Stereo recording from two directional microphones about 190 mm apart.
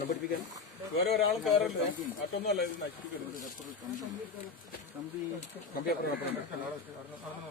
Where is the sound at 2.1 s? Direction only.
55° left (ahead or behind).